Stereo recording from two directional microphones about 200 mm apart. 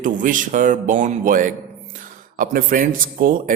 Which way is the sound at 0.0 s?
40° right (ahead or behind).